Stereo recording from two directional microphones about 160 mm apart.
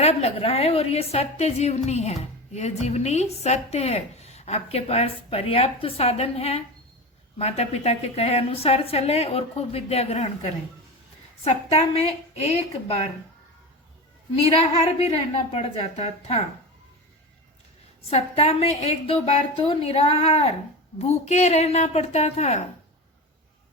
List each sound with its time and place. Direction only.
0.0 s a woman's voice: 40° left (ahead or behind)
14.4 s a woman's voice: 40° left (ahead or behind)
18.1 s a woman's voice: 40° left (ahead or behind)